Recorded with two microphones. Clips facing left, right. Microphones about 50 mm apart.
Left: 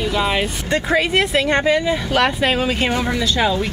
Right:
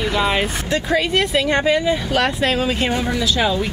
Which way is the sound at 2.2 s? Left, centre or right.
Centre.